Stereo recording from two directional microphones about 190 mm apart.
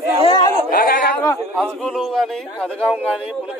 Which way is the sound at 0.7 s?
55° left (ahead or behind).